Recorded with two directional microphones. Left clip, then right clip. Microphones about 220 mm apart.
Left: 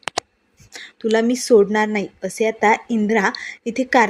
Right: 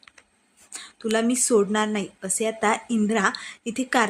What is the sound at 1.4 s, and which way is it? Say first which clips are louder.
Speech: left 9 dB; 10° left (ahead or behind).